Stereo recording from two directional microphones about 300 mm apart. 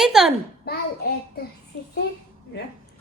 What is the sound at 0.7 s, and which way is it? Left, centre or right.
Speech, left.